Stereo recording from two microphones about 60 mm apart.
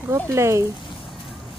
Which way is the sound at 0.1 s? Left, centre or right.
Right.